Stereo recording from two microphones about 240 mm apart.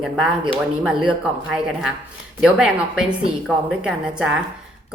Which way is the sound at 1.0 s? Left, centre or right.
Centre.